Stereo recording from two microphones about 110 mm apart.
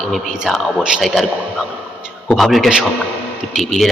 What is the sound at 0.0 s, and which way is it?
A man's voice, centre (ahead or behind).